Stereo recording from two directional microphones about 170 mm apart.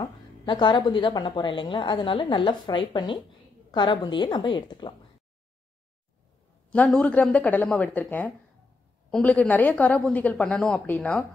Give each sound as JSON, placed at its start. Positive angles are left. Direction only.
{"t": 0.0, "sound": "a woman's voice", "side_deg": 25}
{"t": 6.7, "sound": "a woman's voice", "side_deg": 5}